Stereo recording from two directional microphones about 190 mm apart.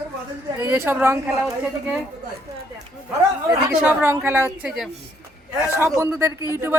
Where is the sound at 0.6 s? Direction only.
10° right (ahead or behind).